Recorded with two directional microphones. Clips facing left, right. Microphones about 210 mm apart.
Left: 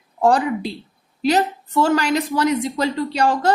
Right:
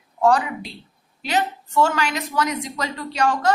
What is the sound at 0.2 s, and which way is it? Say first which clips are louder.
A woman's voice: left 2 dB; 30° left (ahead or behind).